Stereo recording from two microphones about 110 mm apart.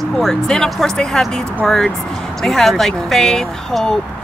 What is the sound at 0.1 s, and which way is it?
Speech, 5° left (ahead or behind).